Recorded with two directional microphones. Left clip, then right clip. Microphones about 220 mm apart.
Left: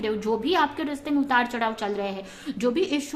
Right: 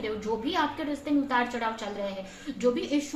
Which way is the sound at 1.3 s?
45° left (ahead or behind).